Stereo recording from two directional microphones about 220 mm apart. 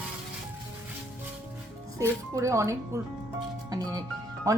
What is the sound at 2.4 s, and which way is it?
Speech, 15° right (ahead or behind).